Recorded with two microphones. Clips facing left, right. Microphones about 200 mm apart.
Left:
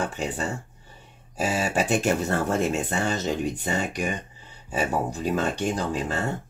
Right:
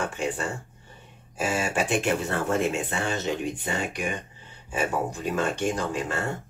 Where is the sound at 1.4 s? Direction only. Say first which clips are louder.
Left 1 dB; 35° left (ahead or behind).